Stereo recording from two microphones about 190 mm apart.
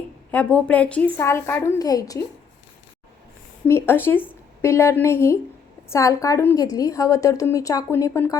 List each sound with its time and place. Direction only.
0.3 s speech: 10° left (ahead or behind)
3.7 s speech: 10° left (ahead or behind)